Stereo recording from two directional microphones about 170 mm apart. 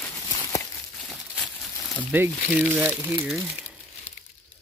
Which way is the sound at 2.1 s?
10° right (ahead or behind).